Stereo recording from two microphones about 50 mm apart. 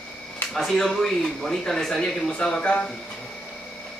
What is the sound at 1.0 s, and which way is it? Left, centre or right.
Speech, centre.